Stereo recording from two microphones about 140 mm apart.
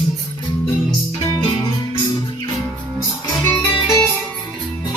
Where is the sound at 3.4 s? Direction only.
25° left (ahead or behind).